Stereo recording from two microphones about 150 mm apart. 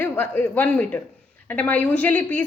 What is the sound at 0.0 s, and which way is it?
Speech, 10° left (ahead or behind).